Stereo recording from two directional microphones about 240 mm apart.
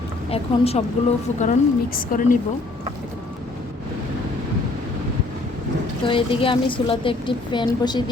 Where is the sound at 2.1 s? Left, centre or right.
Left.